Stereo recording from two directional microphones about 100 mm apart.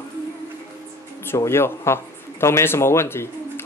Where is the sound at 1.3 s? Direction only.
25° left (ahead or behind).